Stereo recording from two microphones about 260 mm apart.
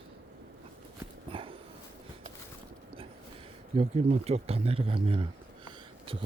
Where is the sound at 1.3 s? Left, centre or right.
Right.